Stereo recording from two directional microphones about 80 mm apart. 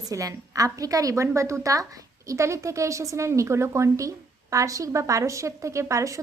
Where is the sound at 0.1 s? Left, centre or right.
Right.